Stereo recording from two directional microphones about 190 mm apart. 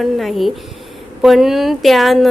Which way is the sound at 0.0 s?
Centre (ahead or behind).